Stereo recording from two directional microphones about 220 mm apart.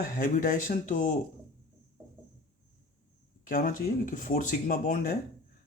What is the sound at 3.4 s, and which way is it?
Speech, 40° left (ahead or behind).